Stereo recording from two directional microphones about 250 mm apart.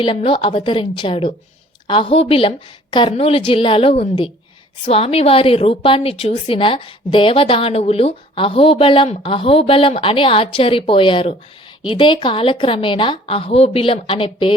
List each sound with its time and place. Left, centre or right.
0.0 s a woman's voice: left